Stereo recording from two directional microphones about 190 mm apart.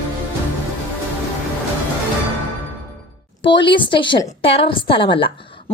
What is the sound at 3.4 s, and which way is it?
A woman's voice, 25° left (ahead or behind).